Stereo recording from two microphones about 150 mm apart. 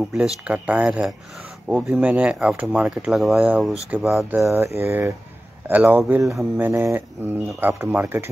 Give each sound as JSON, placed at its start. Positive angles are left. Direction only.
{"t": 0.1, "sound": "speech", "side_deg": -5}
{"t": 4.2, "sound": "speech", "side_deg": -15}